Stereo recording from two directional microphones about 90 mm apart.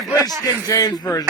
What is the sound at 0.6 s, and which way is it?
Speech, 45° left (ahead or behind).